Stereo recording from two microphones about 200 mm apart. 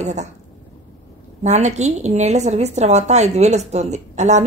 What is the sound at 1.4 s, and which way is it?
A woman's voice, 35° right (ahead or behind).